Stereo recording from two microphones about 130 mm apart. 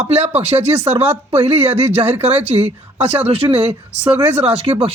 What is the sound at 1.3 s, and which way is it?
Speech, 15° right (ahead or behind).